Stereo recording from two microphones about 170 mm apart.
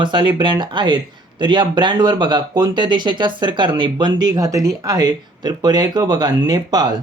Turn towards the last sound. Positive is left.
turn(degrees=-25)  # may be behind; listen again after turning